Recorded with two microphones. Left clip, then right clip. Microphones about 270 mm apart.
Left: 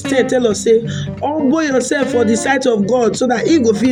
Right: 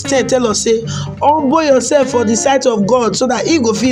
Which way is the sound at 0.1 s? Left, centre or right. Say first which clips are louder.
Right 1 dB; right.